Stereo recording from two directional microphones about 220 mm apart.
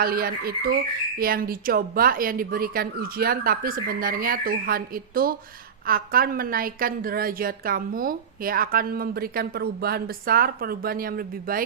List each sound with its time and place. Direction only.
0.0 s a woman's voice: 40° right (ahead or behind)